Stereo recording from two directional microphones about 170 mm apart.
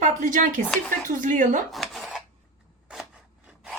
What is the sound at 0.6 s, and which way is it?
Speech, 10° left (ahead or behind).